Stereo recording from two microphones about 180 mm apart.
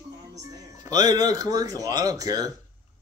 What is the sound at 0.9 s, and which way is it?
Speech, 20° right (ahead or behind).